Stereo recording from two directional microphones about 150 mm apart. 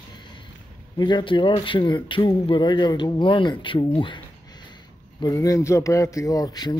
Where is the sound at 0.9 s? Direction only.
30° left (ahead or behind).